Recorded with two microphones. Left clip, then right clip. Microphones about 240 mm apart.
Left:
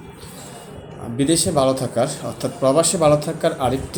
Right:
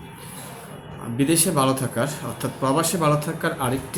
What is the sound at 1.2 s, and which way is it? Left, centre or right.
Speech, right.